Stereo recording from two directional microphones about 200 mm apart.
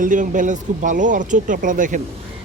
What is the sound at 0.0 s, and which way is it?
Speech, 40° right (ahead or behind).